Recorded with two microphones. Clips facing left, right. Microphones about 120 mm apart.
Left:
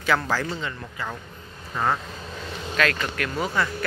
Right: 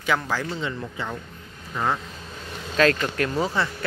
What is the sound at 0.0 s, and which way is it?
Speech, 15° right (ahead or behind).